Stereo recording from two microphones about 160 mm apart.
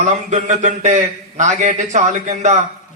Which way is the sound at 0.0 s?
50° right (ahead or behind).